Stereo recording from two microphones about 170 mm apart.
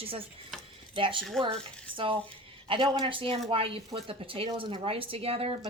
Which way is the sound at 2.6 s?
30° right (ahead or behind).